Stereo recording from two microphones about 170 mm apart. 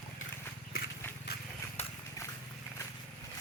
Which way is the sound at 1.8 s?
40° left (ahead or behind).